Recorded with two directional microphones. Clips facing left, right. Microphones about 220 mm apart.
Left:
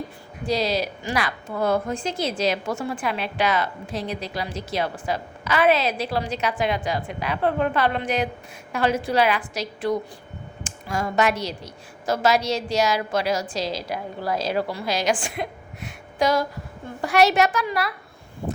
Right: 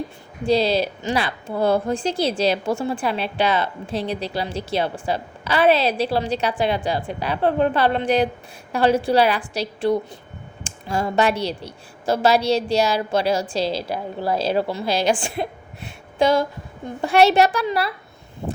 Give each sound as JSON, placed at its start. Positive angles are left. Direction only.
{"t": 0.4, "sound": "a woman's voice", "side_deg": -30}